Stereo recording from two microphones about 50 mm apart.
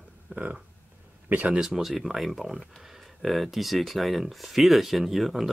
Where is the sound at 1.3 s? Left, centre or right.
Right.